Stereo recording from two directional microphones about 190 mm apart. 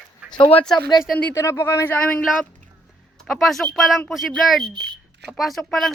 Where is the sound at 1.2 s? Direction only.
15° left (ahead or behind).